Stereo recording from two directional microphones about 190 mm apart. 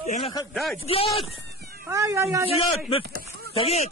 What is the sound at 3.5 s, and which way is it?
Speech, 30° left (ahead or behind).